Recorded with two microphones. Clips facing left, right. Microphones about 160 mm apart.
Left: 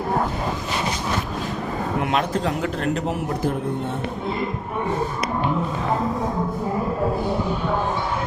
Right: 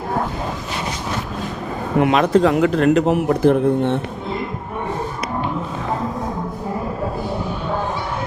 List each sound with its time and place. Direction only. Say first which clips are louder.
2.0 s a man's voice: right 10 dB; 90° right; by 3.9 s 70° right (ahead or behind)